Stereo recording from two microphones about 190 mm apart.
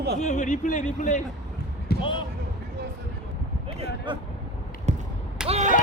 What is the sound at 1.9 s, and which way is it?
Basketball bounce, 55° left (ahead or behind).